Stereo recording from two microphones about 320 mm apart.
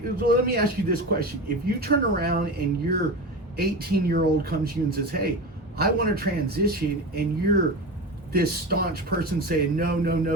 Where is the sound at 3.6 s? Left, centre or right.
Right.